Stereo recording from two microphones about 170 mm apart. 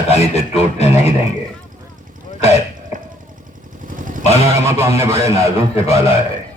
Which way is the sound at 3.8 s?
50° right (ahead or behind).